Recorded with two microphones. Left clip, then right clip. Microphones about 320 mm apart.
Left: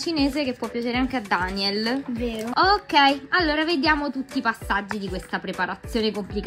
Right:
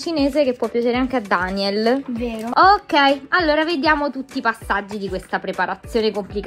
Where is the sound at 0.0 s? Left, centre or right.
Centre.